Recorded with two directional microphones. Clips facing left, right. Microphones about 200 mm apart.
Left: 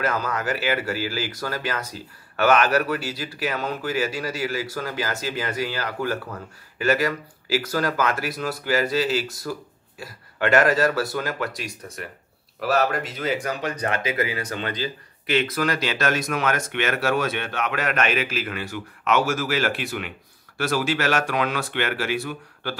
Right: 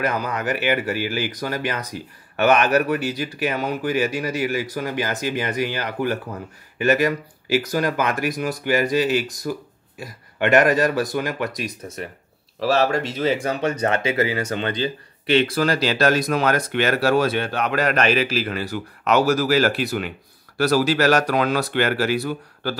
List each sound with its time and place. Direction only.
0.0 s speech: 20° right (ahead or behind); by 22.8 s 35° right (ahead or behind)